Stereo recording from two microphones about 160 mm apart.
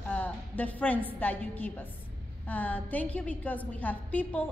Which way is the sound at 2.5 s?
10° left (ahead or behind).